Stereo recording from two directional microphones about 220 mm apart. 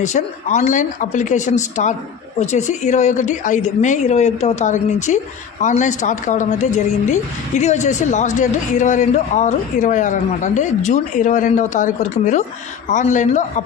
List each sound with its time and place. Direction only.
0.0 s a man's voice: 30° left (ahead or behind)